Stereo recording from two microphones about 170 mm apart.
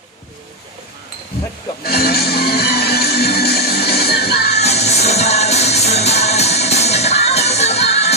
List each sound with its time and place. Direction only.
1.8 s music: 65° left (ahead or behind)
4.5 s music: 40° left (ahead or behind)